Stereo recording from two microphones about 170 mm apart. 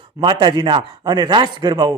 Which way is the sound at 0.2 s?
25° right (ahead or behind).